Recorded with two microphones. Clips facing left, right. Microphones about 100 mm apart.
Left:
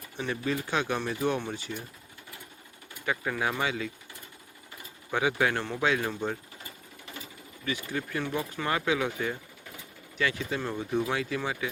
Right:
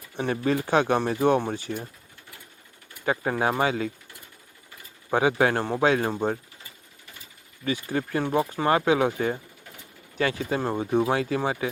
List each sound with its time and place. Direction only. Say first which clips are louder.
0.2 s speech: right 6 dB; 45° right (ahead or behind)
3.1 s speech: right 6 dB; 35° right (ahead or behind)
5.1 s speech: right 5 dB; 35° right (ahead or behind)
7.6 s speech: right 6 dB; 35° right (ahead or behind)